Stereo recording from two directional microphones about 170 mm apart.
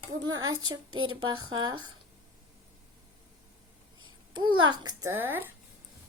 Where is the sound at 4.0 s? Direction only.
25° right (ahead or behind).